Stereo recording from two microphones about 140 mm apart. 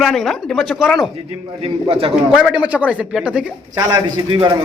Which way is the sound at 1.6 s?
45° right (ahead or behind).